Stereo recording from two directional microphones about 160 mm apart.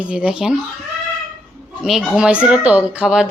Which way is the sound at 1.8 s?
Centre (ahead or behind).